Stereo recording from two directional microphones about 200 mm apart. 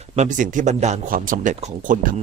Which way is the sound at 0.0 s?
35° right (ahead or behind).